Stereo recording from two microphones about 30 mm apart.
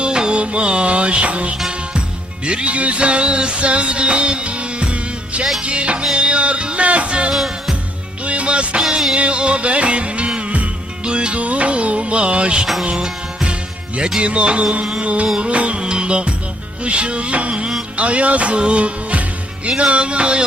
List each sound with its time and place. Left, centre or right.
0.0 s music: right
2.7 s music: right
11.0 s music: right
11.3 s music: right